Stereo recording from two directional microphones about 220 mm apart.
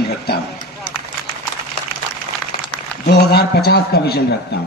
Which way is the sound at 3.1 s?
45° left (ahead or behind).